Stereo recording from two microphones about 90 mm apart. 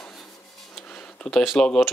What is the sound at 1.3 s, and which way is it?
Speech, centre (ahead or behind).